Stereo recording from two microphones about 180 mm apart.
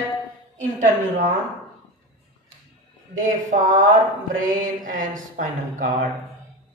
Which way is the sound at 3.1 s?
45° right (ahead or behind).